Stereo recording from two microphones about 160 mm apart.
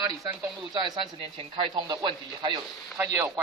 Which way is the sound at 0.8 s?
35° right (ahead or behind).